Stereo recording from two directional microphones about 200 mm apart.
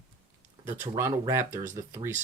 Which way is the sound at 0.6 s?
15° right (ahead or behind).